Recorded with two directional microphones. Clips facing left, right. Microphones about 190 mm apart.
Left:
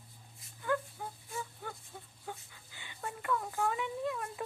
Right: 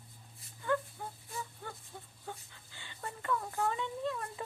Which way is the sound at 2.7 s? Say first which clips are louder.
Even; 15° left (ahead or behind).